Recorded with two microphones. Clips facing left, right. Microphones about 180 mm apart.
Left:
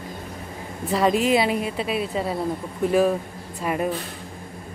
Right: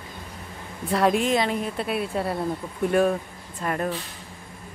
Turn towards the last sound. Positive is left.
turn(degrees=5)  # may be behind; listen again after turning